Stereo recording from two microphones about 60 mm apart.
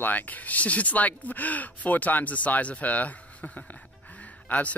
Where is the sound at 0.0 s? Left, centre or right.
Left.